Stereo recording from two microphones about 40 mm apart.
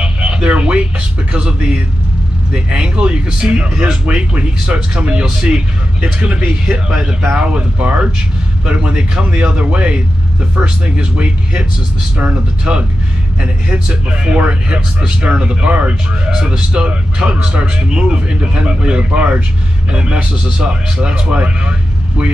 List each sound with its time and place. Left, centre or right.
0.0 s a sound: right
2.5 s speech: right
7.3 s speech: right